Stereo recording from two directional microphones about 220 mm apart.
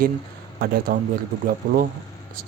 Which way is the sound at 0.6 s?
40° right (ahead or behind).